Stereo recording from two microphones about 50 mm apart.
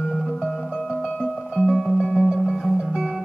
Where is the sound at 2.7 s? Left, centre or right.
Centre.